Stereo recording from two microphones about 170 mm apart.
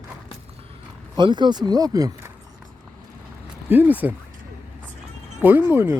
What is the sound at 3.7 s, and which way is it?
Speech, 10° right (ahead or behind).